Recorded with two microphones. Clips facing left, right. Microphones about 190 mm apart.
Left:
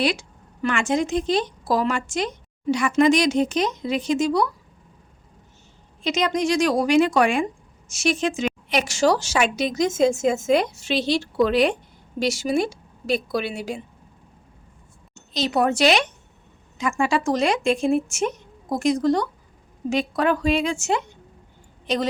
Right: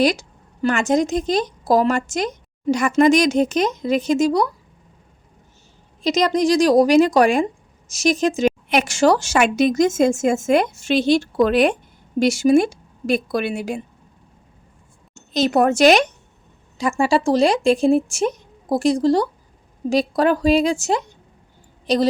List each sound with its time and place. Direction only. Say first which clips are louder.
0.0 s a woman's voice: right 5 dB; 40° right (ahead or behind)
6.0 s a woman's voice: right 5 dB; 40° right (ahead or behind)
8.7 s a woman's voice: right 2 dB; 50° right (ahead or behind)
15.1 s speech: right 5 dB; 50° right (ahead or behind)
17.0 s a woman's voice: right 5 dB; 30° right (ahead or behind)